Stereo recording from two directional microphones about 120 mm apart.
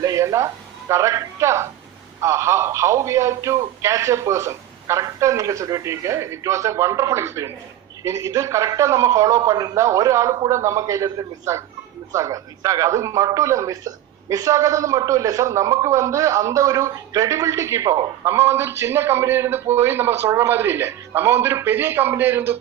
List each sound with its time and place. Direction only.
0.0 s a man's voice: 25° right (ahead or behind)